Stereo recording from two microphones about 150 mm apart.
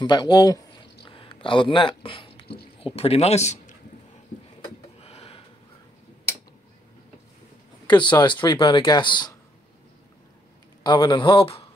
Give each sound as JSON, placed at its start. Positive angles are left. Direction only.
{"t": 0.0, "sound": "speech", "side_deg": 30}
{"t": 1.0, "sound": "a sound", "side_deg": 35}
{"t": 2.8, "sound": "a man's voice", "side_deg": 40}
{"t": 5.0, "sound": "a sound", "side_deg": 40}
{"t": 7.8, "sound": "speech", "side_deg": 30}
{"t": 10.8, "sound": "speech", "side_deg": 30}